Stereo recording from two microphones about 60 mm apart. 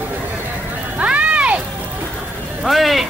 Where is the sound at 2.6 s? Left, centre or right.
Centre.